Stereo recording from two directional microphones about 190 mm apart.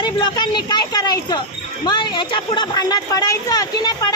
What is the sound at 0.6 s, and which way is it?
Speech, 20° left (ahead or behind).